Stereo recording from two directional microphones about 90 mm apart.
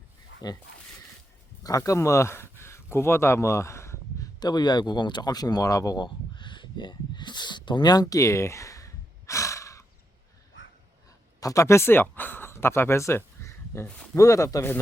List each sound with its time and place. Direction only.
0.4 s speech: 50° left (ahead or behind)
1.6 s speech: 35° left (ahead or behind)
4.4 s speech: 50° left (ahead or behind)
6.3 s a sound: 65° left (ahead or behind); by 9.8 s 35° left (ahead or behind)
11.3 s speech: 40° left (ahead or behind)
13.8 s speech: 10° left (ahead or behind)
14.2 s speech: 35° left (ahead or behind)